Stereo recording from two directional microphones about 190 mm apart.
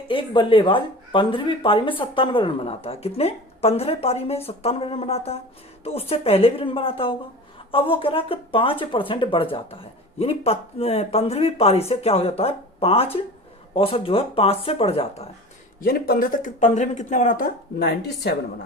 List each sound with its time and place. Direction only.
0.1 s speech: 25° left (ahead or behind)
15.8 s speech: 50° left (ahead or behind)